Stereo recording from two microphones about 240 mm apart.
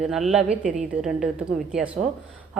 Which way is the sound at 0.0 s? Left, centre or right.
Centre.